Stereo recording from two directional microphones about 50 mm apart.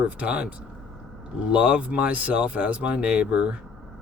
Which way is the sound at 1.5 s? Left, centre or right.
Right.